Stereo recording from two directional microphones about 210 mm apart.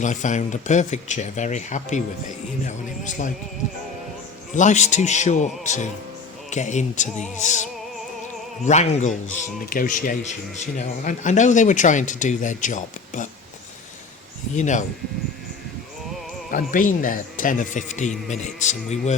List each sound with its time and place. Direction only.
0.0 s speech: 35° left (ahead or behind)
4.5 s speech: 35° left (ahead or behind)
14.5 s speech: 35° left (ahead or behind)
16.5 s speech: 40° left (ahead or behind)